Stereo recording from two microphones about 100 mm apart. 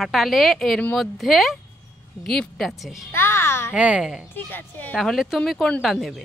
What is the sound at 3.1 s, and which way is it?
Speech, 25° left (ahead or behind).